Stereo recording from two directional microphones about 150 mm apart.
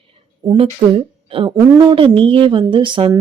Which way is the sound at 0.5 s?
40° right (ahead or behind).